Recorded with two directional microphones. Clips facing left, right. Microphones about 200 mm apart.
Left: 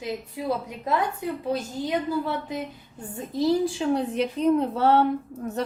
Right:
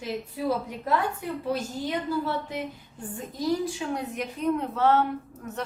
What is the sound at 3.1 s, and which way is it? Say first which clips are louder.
Speech: left 5 dB; 25° left (ahead or behind).